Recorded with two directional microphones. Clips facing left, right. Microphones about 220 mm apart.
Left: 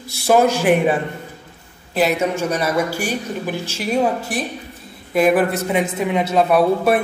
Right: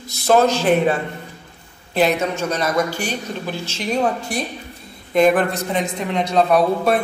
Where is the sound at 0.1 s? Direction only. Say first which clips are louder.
Even; 10° left (ahead or behind).